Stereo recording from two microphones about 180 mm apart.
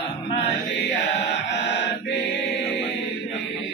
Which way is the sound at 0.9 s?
80° left.